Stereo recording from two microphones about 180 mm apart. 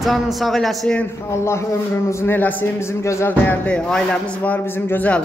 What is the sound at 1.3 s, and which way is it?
A man's voice, 15° left (ahead or behind).